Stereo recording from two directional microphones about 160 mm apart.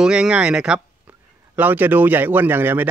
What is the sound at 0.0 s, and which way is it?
Speech, 5° right (ahead or behind).